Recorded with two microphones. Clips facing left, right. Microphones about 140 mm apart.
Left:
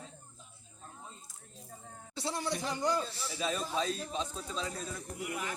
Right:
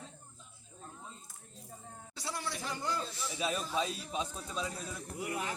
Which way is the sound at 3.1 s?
35° left (ahead or behind).